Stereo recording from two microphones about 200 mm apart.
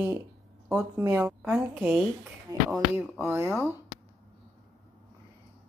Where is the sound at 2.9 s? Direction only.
10° right (ahead or behind).